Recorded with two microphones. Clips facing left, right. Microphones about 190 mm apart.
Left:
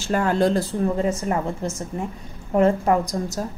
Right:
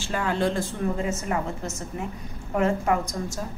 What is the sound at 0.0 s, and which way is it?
A woman's voice, 45° left (ahead or behind).